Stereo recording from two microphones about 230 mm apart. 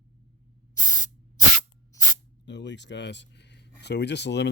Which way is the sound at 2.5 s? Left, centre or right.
Left.